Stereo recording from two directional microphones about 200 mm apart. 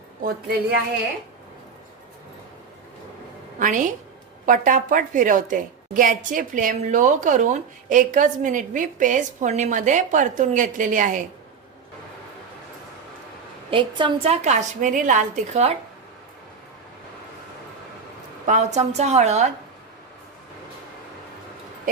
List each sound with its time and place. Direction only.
0.2 s speech: 50° right (ahead or behind)
3.6 s a woman's voice: 40° right (ahead or behind)
13.7 s a woman's voice: 25° right (ahead or behind)
18.4 s a woman's voice: 35° right (ahead or behind)